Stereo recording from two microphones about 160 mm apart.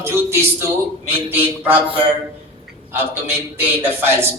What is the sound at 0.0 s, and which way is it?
A man's voice, 15° right (ahead or behind).